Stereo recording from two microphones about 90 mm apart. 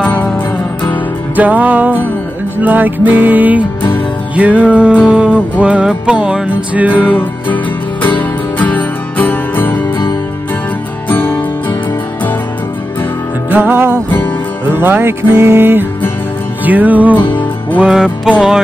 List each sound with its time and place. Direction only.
0.0 s music: 20° left (ahead or behind)
1.3 s music: 20° right (ahead or behind)
7.2 s music: 20° left (ahead or behind)
11.1 s music: 25° left (ahead or behind)
13.5 s music: 20° right (ahead or behind)
17.2 s music: 60° left (ahead or behind)
17.7 s music: 10° right (ahead or behind)